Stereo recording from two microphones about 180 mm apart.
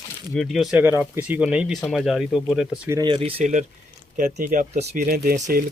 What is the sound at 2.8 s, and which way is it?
Speech, 20° right (ahead or behind).